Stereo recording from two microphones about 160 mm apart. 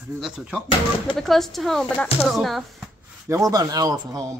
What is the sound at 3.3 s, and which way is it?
Speech, 20° right (ahead or behind).